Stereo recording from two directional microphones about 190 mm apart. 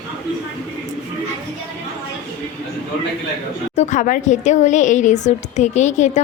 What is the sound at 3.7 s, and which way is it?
Speech, 40° left (ahead or behind).